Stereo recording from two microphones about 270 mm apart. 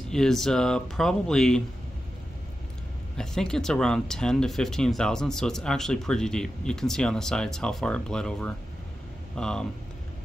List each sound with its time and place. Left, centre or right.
0.1 s speech: centre
3.2 s speech: centre